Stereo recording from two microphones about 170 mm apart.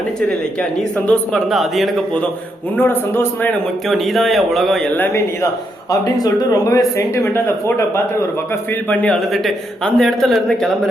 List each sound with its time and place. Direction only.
1.0 s speech: 5° left (ahead or behind)
2.7 s speech: 10° left (ahead or behind)
3.8 s speech: centre (ahead or behind)
4.9 s speech: 10° left (ahead or behind)